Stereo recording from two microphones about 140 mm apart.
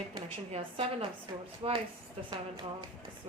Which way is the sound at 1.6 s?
35° right (ahead or behind).